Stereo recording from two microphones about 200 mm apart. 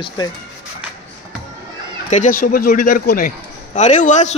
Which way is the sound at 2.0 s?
40° left (ahead or behind).